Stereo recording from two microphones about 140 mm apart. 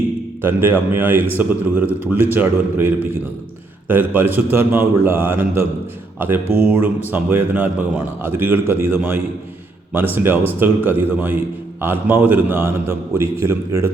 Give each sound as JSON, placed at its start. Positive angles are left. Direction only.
{"t": 0.4, "sound": "a man's voice", "side_deg": -15}